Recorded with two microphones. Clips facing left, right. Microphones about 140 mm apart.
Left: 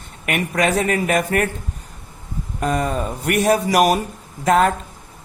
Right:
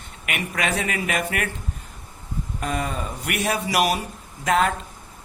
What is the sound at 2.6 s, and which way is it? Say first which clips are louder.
Speech: left 7 dB; 40° left (ahead or behind).